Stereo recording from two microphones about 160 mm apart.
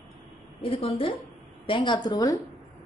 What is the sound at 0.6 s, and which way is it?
A woman's voice, 35° left (ahead or behind).